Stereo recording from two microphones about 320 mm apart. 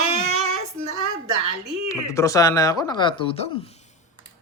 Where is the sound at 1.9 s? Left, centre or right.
Centre.